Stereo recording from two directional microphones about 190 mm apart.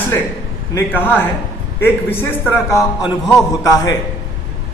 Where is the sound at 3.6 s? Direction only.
20° left (ahead or behind).